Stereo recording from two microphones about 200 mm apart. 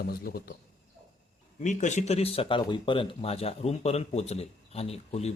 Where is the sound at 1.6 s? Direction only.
35° left (ahead or behind).